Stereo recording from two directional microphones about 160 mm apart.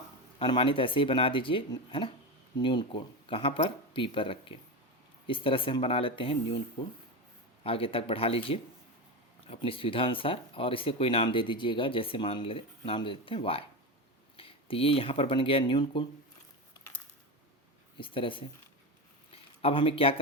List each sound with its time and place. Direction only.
0.3 s speech: 35° left (ahead or behind)
7.6 s speech: 35° left (ahead or behind)
17.9 s speech: 35° left (ahead or behind)
19.3 s a sound: 35° left (ahead or behind)